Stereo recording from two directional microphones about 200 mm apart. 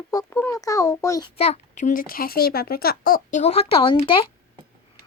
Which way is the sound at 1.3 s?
30° left (ahead or behind).